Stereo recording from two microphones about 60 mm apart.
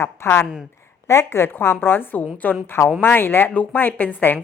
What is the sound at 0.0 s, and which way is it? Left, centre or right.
Speech, left.